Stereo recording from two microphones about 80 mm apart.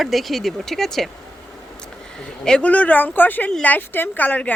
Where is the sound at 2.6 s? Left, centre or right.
Centre.